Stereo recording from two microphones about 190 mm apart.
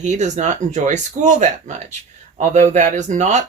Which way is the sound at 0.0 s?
40° right (ahead or behind).